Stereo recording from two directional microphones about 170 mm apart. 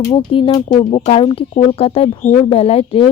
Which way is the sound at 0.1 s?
30° left (ahead or behind).